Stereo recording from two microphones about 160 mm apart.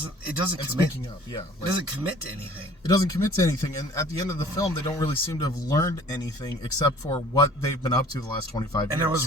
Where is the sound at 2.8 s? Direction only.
20° left (ahead or behind).